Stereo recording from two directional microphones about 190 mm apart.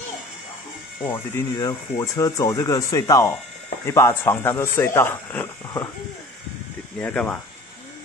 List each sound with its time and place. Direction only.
1.0 s speech: 10° left (ahead or behind)
7.0 s speech: 5° left (ahead or behind)